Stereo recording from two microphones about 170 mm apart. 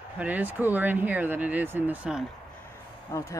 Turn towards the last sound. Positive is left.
turn(degrees=15)  # may be behind; listen again after turning